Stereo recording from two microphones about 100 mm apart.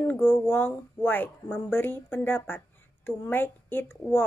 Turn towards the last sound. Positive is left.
turn(degrees=20)  # may be behind; listen again after turning